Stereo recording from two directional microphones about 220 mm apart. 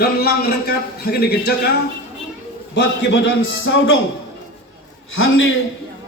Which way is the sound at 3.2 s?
60° left (ahead or behind).